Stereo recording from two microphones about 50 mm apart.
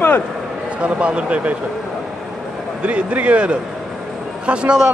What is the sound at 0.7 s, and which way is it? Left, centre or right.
Speech, right.